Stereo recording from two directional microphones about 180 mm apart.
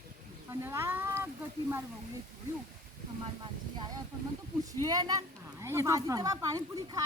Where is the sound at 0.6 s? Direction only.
15° right (ahead or behind).